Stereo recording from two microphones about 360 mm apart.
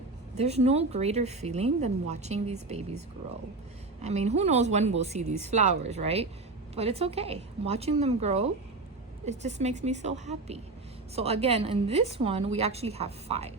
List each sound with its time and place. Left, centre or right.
0.3 s speech: centre
4.0 s a woman's voice: centre